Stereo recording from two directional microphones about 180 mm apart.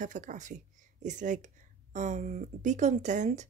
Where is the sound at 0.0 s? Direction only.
45° right (ahead or behind).